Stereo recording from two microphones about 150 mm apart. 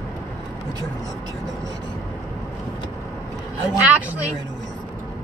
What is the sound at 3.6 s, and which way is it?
Speech, 10° right (ahead or behind).